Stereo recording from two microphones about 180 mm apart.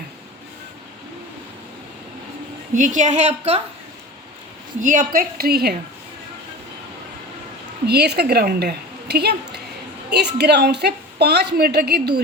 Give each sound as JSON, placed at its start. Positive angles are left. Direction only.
{"t": 2.7, "sound": "a woman's voice", "side_deg": -45}
{"t": 4.8, "sound": "a woman's voice", "side_deg": -50}
{"t": 7.9, "sound": "a woman's voice", "side_deg": -65}